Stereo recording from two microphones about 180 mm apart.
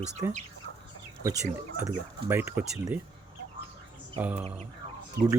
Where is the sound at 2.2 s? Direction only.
15° right (ahead or behind).